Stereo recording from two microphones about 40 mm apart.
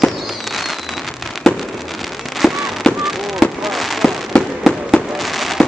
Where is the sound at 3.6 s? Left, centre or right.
Centre.